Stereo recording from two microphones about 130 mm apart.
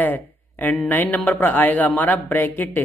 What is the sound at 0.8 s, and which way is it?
Speech, 15° left (ahead or behind).